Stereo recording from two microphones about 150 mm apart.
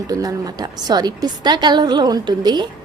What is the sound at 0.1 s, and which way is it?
A woman's voice, 25° right (ahead or behind).